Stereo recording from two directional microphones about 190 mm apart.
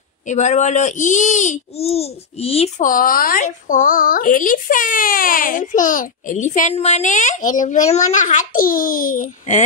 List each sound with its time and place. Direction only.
0.3 s a child's voice: 40° left (ahead or behind)
2.9 s a woman's voice: 45° left (ahead or behind)